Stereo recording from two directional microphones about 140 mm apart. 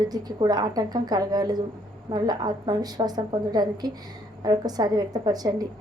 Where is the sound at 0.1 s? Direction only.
30° right (ahead or behind).